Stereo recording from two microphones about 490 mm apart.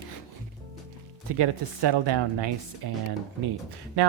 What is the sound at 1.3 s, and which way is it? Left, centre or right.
Speech, right.